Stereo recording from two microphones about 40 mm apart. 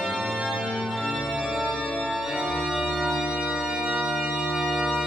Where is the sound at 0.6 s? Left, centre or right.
Right.